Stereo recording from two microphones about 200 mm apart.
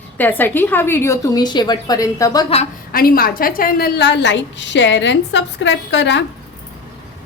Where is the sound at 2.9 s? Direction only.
45° left (ahead or behind).